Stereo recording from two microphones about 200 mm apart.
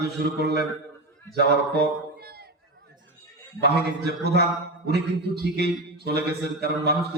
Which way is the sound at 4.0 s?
55° right (ahead or behind).